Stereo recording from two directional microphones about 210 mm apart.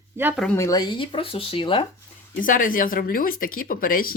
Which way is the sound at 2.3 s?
40° left (ahead or behind).